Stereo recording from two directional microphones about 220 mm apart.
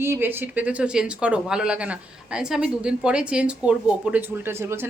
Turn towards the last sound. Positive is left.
turn(degrees=-10)  # may be behind; listen again after turning